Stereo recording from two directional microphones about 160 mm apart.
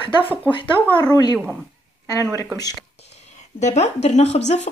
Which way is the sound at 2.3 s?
25° left (ahead or behind).